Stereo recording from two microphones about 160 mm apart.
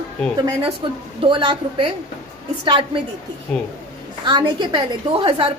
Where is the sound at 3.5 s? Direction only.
5° left (ahead or behind).